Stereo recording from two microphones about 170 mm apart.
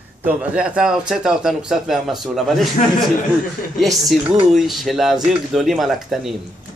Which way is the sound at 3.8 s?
Centre (ahead or behind).